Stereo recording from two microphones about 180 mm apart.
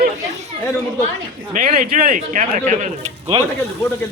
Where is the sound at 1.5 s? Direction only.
50° right (ahead or behind).